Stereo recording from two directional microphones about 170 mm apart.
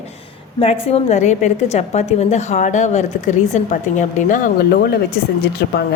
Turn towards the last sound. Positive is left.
turn(degrees=70)  # may be behind; listen again after turning